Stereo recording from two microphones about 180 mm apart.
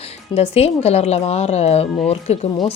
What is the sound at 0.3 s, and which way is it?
Speech, 35° left (ahead or behind).